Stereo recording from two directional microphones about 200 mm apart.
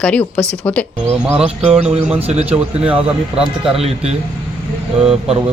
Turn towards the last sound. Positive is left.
turn(degrees=-5)  # may be behind; listen again after turning